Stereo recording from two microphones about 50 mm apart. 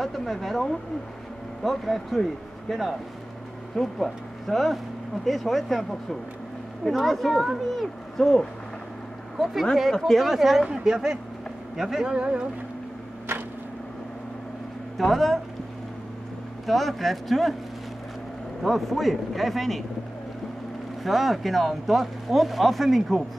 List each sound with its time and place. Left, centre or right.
0.0 s speech: centre; by 12.4 s right
13.3 s a sound: right
15.0 s speech: centre
16.6 s speech: centre
18.6 s speech: centre
21.0 s speech: centre